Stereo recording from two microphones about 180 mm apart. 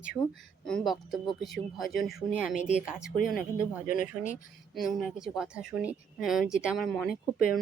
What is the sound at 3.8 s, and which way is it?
Speech, 50° left (ahead or behind).